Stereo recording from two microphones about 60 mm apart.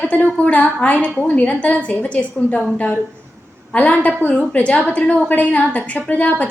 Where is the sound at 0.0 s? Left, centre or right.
Left.